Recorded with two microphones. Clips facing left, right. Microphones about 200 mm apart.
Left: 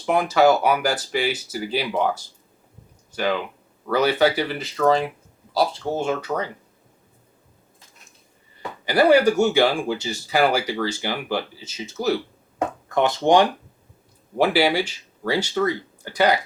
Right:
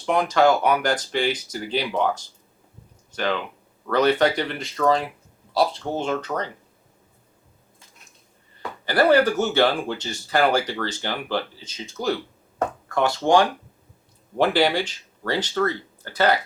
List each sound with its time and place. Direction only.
0.0 s speech: 5° left (ahead or behind)
8.9 s speech: 10° left (ahead or behind)
12.5 s speech: 20° left (ahead or behind)
14.3 s speech: 10° left (ahead or behind)